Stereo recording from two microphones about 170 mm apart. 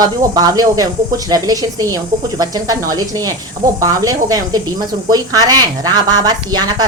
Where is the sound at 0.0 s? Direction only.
20° right (ahead or behind).